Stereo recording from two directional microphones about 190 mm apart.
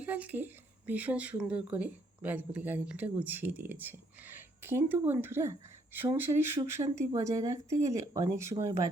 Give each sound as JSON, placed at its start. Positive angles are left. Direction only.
{"t": 0.0, "sound": "speech", "side_deg": -10}